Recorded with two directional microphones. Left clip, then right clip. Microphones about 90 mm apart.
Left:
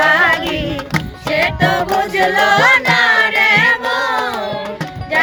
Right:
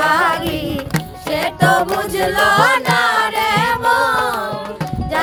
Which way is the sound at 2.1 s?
50° right (ahead or behind).